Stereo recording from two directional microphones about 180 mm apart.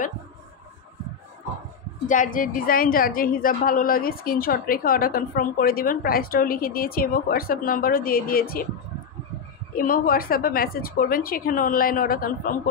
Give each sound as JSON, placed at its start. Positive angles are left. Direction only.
{"t": 2.0, "sound": "a woman's voice", "side_deg": 45}
{"t": 9.8, "sound": "a woman's voice", "side_deg": 50}